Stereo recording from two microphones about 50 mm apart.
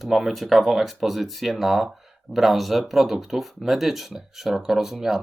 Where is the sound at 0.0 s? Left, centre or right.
Centre.